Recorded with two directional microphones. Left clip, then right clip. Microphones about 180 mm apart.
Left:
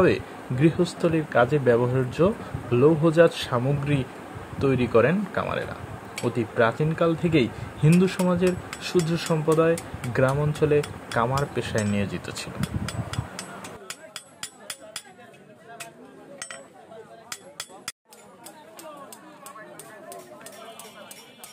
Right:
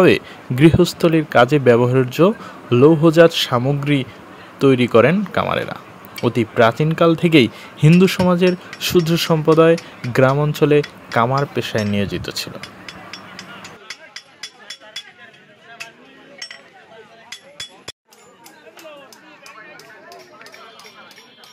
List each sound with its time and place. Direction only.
0.0 s speech: 40° right (ahead or behind)